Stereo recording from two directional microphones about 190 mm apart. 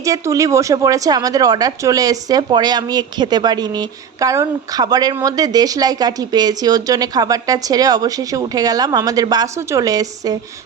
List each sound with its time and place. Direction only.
0.0 s speech: 15° right (ahead or behind)